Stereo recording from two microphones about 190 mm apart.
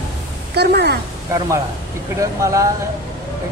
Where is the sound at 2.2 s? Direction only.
15° right (ahead or behind).